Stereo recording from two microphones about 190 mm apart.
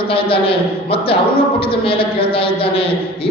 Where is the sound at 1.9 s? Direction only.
30° left (ahead or behind).